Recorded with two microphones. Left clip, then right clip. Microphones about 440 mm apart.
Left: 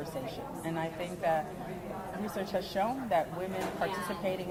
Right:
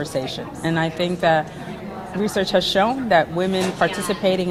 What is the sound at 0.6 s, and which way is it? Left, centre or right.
Speech, right.